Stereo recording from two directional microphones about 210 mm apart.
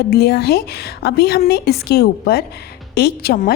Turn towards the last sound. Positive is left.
turn(degrees=45)  # may be behind; listen again after turning